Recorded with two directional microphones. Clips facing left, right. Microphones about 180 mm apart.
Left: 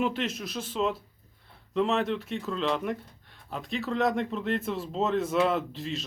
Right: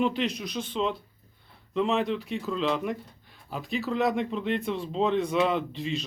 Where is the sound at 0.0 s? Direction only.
Centre (ahead or behind).